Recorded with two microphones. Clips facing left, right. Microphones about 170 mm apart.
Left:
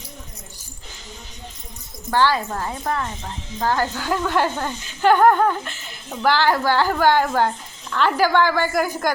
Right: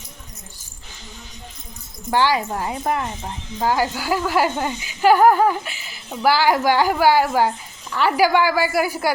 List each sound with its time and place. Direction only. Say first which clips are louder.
2.0 s speech: even; 15° right (ahead or behind)